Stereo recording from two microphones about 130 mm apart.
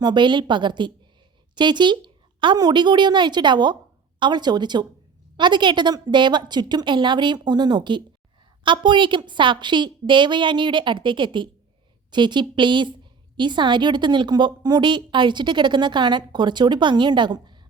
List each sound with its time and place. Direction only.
0.0 s a woman's voice: 35° right (ahead or behind)